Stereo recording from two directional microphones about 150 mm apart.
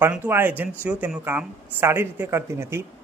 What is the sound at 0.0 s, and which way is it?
A man's voice, 15° right (ahead or behind).